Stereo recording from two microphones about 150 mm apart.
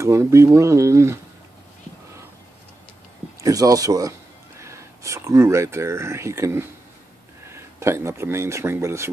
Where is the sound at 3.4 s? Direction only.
25° right (ahead or behind).